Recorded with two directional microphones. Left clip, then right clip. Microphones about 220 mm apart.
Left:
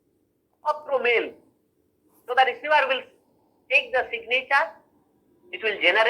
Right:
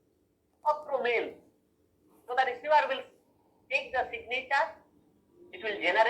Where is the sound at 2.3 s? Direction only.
30° left (ahead or behind).